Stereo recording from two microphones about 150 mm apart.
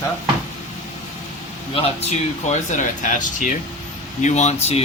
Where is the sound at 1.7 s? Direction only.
45° left (ahead or behind).